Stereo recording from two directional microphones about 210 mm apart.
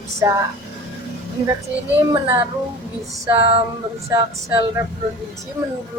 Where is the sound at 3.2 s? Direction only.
25° right (ahead or behind).